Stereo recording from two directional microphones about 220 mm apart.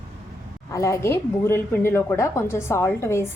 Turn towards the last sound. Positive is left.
turn(degrees=10)  # may be behind; listen again after turning